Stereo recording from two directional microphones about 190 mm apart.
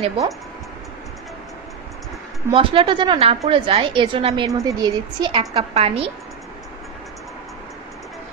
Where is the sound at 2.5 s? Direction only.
30° right (ahead or behind).